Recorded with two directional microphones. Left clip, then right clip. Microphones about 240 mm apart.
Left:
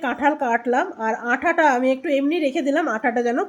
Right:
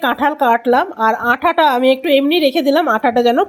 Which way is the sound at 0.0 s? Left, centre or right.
Centre.